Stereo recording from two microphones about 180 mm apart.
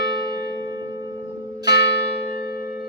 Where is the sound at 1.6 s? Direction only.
65° left (ahead or behind).